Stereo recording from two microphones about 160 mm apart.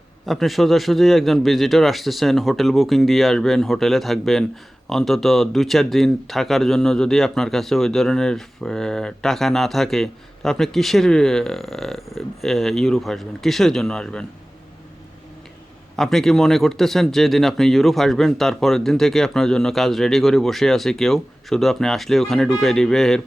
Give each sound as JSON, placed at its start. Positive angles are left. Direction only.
{"t": 0.3, "sound": "speech", "side_deg": 0}
{"t": 16.0, "sound": "speech", "side_deg": 0}